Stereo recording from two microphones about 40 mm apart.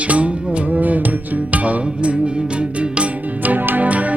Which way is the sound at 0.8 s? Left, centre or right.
Right.